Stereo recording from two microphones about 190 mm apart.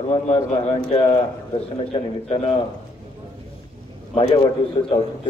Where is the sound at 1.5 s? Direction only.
30° left (ahead or behind).